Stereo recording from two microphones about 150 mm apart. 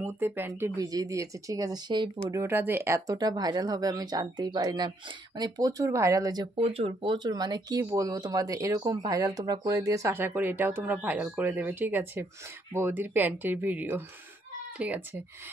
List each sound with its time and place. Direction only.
0.0 s speech: 15° right (ahead or behind)
2.4 s speech: 15° right (ahead or behind)